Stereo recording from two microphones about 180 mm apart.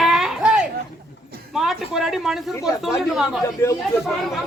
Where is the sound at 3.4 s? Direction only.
15° left (ahead or behind).